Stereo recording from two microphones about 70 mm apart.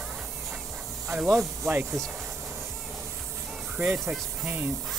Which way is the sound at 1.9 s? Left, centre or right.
Centre.